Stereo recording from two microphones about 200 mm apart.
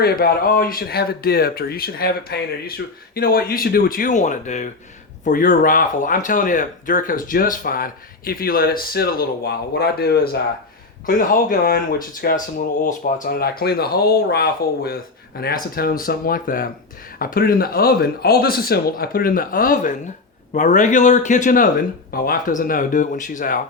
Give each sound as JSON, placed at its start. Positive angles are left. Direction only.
{"t": 0.0, "sound": "speech", "side_deg": 50}